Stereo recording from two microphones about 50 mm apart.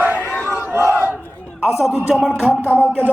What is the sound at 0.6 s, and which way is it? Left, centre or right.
Battle cry, right.